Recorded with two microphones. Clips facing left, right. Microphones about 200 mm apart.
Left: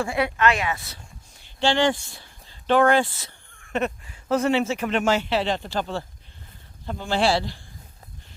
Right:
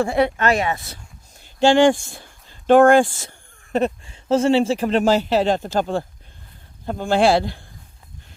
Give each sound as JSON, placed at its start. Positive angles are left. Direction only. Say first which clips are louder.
{"t": 0.1, "sound": "speech", "louder": "right 4 dB", "side_deg": -40}